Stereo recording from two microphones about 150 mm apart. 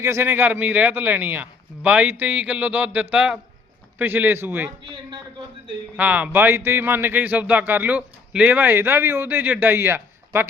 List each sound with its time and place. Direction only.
0.0 s speech: 15° right (ahead or behind)
6.0 s speech: 10° right (ahead or behind)